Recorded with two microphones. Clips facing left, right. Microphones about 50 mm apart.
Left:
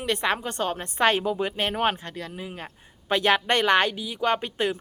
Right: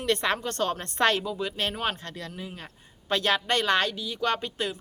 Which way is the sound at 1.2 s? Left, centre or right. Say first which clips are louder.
Left 4 dB; left.